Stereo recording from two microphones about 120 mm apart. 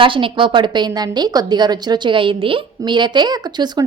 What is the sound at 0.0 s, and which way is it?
Speech, 45° right (ahead or behind).